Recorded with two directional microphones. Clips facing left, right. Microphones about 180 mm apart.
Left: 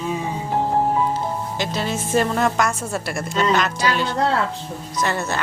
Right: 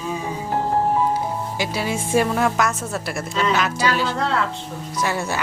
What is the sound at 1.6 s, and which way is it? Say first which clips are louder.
A woman's voice: right 1 dB; 10° right (ahead or behind).